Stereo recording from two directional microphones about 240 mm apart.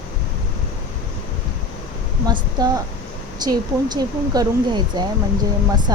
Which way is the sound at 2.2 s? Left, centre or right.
Centre.